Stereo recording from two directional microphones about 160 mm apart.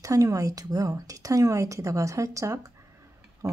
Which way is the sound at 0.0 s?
20° right (ahead or behind).